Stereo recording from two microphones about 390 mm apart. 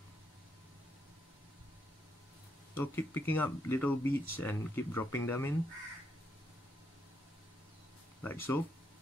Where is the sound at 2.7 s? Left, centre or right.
Centre.